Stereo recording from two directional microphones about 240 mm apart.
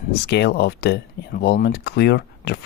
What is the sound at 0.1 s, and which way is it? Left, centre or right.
Speech, left.